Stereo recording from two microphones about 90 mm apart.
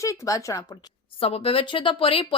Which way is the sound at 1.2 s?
90° left.